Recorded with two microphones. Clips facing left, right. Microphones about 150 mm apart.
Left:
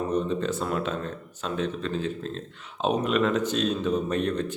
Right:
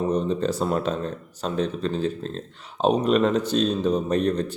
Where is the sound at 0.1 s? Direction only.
35° right (ahead or behind).